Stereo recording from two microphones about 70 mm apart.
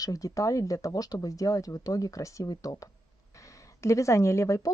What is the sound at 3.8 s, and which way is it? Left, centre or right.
Speech, left.